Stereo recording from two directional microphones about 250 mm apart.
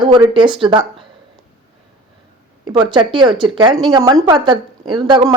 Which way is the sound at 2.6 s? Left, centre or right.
Centre.